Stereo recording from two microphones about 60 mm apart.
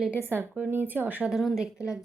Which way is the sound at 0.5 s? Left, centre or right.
Right.